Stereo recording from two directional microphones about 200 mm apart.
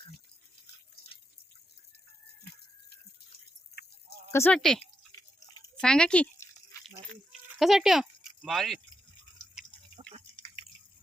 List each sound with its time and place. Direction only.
4.3 s speech: 10° left (ahead or behind)
5.8 s a sound: 5° left (ahead or behind)
7.6 s speech: centre (ahead or behind)
10.3 s drip: 25° left (ahead or behind)